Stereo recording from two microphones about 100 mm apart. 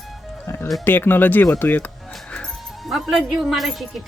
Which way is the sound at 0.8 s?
20° left (ahead or behind).